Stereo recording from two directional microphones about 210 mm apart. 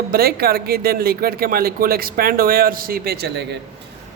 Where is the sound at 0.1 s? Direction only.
45° right (ahead or behind).